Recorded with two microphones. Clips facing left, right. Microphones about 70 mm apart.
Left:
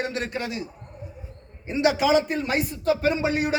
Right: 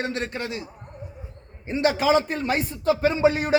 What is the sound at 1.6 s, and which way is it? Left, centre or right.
A man's voice, centre.